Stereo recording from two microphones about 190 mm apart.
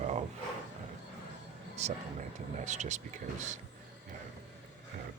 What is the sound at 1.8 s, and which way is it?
Speech, 35° right (ahead or behind).